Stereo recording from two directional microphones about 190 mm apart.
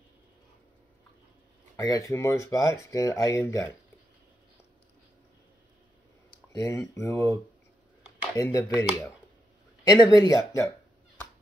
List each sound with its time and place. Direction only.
1.8 s speech: 20° left (ahead or behind)
6.5 s speech: 15° left (ahead or behind)
8.4 s speech: 15° left (ahead or behind)
9.8 s speech: 20° left (ahead or behind)